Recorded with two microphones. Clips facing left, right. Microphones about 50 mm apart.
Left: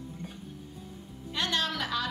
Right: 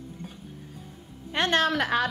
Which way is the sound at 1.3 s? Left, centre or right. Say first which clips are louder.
Right 7 dB; right.